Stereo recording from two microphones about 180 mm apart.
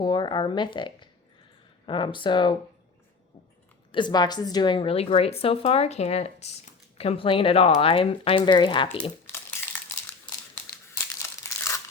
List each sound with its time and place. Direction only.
0.0 s speech: 25° left (ahead or behind)
3.9 s a woman's voice: 25° left (ahead or behind)
9.2 s crumpling: 15° left (ahead or behind)
11.2 s crumpling: 15° left (ahead or behind)